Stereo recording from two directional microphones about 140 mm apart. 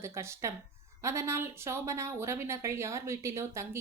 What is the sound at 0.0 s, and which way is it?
Speech, 20° right (ahead or behind).